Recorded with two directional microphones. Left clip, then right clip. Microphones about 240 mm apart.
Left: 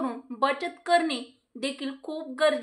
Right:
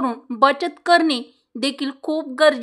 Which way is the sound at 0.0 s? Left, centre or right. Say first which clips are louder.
Right 10 dB; right.